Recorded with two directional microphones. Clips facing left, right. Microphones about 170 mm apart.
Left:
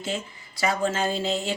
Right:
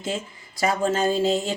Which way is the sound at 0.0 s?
45° right (ahead or behind).